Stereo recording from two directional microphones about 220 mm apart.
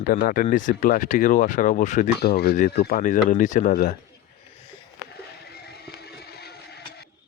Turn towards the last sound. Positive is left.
turn(degrees=45)  # may be behind; listen again after turning